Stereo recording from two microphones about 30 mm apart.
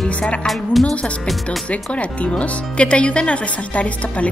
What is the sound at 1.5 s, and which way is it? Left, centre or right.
A woman's voice, left.